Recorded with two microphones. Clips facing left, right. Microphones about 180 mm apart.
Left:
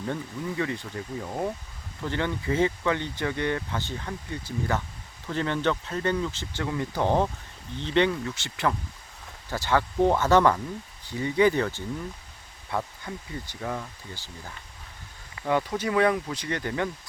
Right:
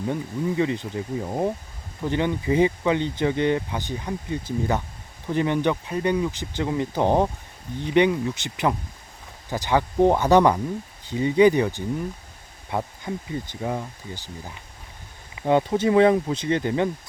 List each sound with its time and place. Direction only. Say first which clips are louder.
0.0 s speech: right 5 dB; 15° right (ahead or behind)